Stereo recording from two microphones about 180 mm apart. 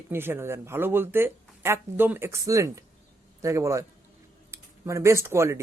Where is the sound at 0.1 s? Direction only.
15° right (ahead or behind).